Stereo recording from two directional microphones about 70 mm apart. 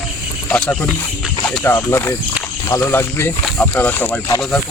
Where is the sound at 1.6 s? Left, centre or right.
Left.